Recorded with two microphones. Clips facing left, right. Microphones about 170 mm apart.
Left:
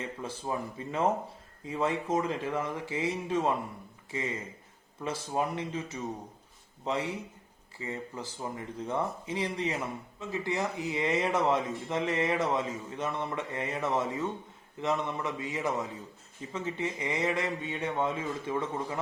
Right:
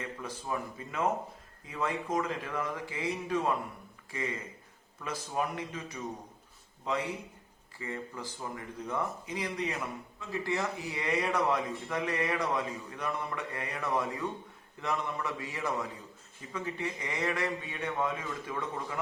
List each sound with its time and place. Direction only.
0.0 s speech: 25° left (ahead or behind)
7.8 s speech: 20° left (ahead or behind)